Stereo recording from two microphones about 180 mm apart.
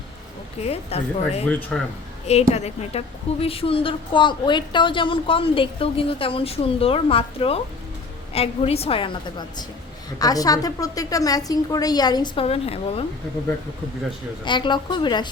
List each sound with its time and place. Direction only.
0.6 s a woman's voice: 35° left (ahead or behind)
1.5 s speech: 5° left (ahead or behind)
2.5 s a woman's voice: 35° left (ahead or behind)
10.2 s a woman's voice: 20° left (ahead or behind)
14.4 s a woman's voice: 25° left (ahead or behind)